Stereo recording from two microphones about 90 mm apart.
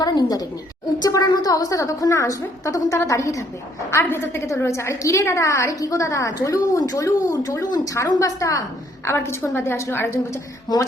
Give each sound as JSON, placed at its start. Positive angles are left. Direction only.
{"t": 0.0, "sound": "a woman's voice", "side_deg": 45}
{"t": 10.7, "sound": "speech", "side_deg": 50}